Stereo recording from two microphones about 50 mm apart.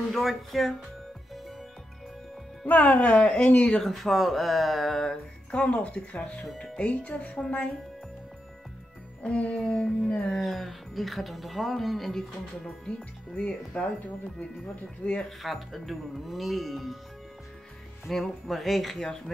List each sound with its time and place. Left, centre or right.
0.1 s speech: centre
2.6 s speech: left
3.3 s music: left
3.8 s speech: centre
5.5 s music: left
9.2 s music: left
10.3 s speech: centre
13.4 s music: left
15.2 s speech: centre
18.0 s speech: centre